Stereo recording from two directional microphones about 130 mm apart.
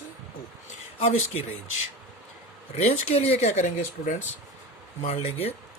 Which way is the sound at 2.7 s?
55° left (ahead or behind).